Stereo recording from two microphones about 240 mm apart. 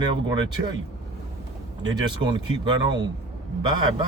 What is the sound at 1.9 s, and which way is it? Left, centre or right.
Speech, centre.